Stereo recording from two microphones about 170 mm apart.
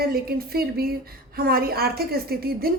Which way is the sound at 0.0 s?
65° right (ahead or behind).